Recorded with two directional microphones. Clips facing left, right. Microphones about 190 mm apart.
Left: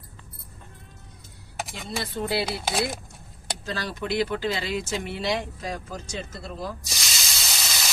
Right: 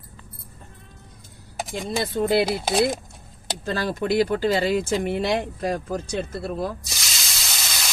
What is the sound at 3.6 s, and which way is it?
Speech, 50° right (ahead or behind).